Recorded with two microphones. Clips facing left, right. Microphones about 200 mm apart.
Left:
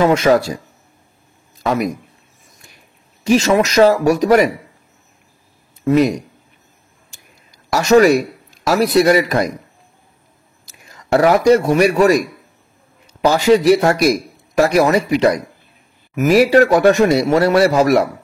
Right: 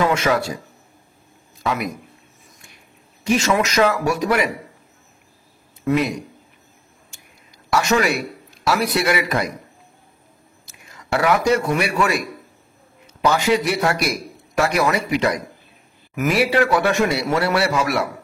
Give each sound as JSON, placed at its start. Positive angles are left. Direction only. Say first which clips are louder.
{"t": 0.0, "sound": "speech", "louder": "left 6 dB", "side_deg": 35}
{"t": 1.6, "sound": "a man's voice", "louder": "left 6 dB", "side_deg": 40}
{"t": 3.3, "sound": "speech", "louder": "left 5 dB", "side_deg": 35}
{"t": 5.9, "sound": "speech", "louder": "left 6 dB", "side_deg": 40}
{"t": 7.7, "sound": "a man's voice", "louder": "left 8 dB", "side_deg": 40}
{"t": 10.6, "sound": "a man's voice", "louder": "left 2 dB", "side_deg": 35}
{"t": 13.2, "sound": "speech", "louder": "left 6 dB", "side_deg": 35}
{"t": 16.3, "sound": "speech", "louder": "left 7 dB", "side_deg": 40}